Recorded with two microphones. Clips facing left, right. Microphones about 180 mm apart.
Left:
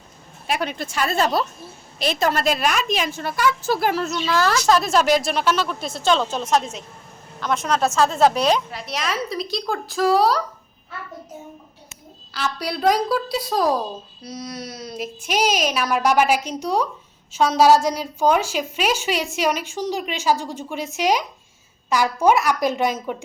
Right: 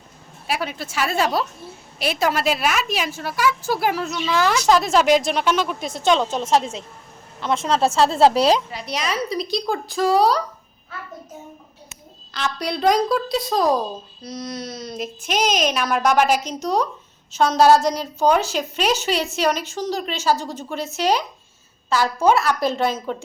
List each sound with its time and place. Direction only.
0.4 s a woman's voice: 5° right (ahead or behind); by 8.6 s 30° right (ahead or behind)
8.7 s a woman's voice: centre (ahead or behind)
12.3 s a woman's voice: 5° left (ahead or behind)